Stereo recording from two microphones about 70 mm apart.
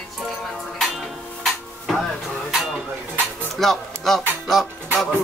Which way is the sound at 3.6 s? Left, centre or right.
Centre.